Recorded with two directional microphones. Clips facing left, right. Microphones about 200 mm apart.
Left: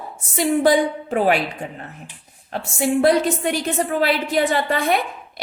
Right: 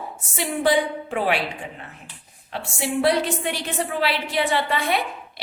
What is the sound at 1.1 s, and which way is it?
Speech, 45° left (ahead or behind).